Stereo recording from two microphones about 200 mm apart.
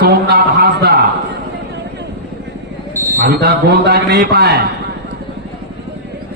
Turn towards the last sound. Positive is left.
turn(degrees=-55)  # may be behind; listen again after turning